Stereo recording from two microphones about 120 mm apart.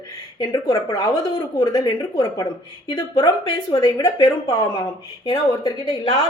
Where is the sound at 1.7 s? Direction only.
30° left (ahead or behind).